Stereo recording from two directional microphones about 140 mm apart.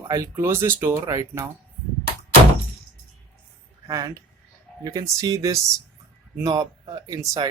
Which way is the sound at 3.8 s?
25° right (ahead or behind).